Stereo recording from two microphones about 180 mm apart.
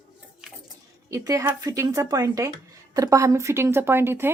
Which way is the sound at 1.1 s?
15° right (ahead or behind).